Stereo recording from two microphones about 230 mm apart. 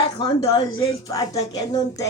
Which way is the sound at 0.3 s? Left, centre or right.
Left.